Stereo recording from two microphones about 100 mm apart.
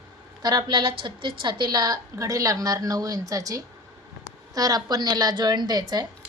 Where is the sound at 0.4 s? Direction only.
50° right (ahead or behind).